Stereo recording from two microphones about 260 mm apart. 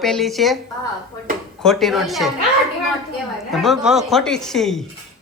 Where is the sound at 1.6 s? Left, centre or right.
Centre.